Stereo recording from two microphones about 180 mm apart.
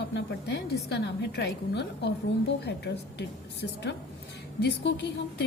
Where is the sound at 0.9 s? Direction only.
65° left (ahead or behind).